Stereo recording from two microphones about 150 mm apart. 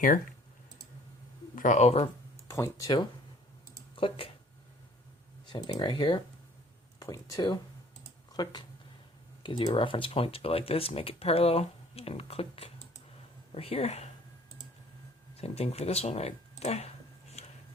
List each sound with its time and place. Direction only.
1.5 s speech: 55° left (ahead or behind)
2.5 s speech: 20° left (ahead or behind)
3.9 s speech: 35° left (ahead or behind)
5.5 s speech: 25° left (ahead or behind); by 14.1 s 45° left (ahead or behind)
15.4 s speech: 45° left (ahead or behind)